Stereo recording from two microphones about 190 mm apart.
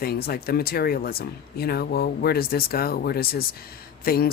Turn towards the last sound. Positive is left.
turn(degrees=50)  # may be behind; listen again after turning